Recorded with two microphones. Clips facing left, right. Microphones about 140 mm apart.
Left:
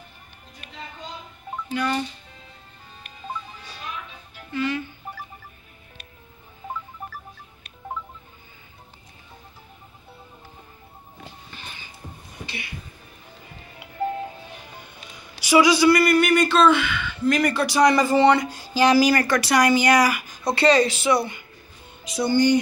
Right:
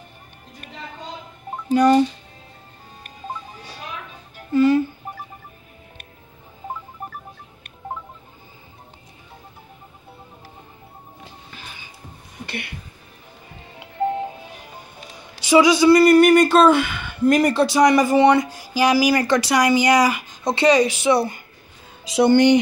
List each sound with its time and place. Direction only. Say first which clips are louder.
1.7 s speech: right 11 dB; 40° right (ahead or behind)
3.0 s music: right 1 dB; 40° right (ahead or behind)
7.0 s music: right 3 dB; 45° right (ahead or behind)
11.5 s music: right 2 dB; centre (ahead or behind)
12.4 s music: right 6 dB; 60° right (ahead or behind)
13.7 s music: right 4 dB; 25° right (ahead or behind)
14.8 s music: right 3 dB; 35° right (ahead or behind)
15.4 s a man's voice: right 3 dB; 20° right (ahead or behind)
16.0 s speech: right 6 dB; 40° right (ahead or behind)
17.6 s speech: right 3 dB; 20° right (ahead or behind)
21.1 s speech: right 3 dB; 35° right (ahead or behind)
22.1 s speech: right 5 dB; 70° right (ahead or behind)